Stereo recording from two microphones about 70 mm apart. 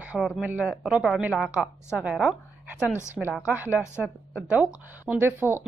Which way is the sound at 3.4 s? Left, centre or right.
Right.